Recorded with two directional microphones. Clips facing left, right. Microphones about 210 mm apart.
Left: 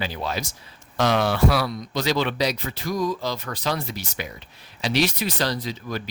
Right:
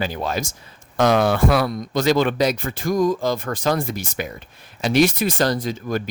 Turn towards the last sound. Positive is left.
turn(degrees=-50)  # may be behind; listen again after turning